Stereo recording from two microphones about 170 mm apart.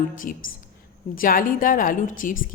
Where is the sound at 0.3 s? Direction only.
55° left (ahead or behind).